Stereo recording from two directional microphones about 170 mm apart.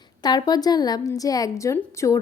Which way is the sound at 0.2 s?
25° left (ahead or behind).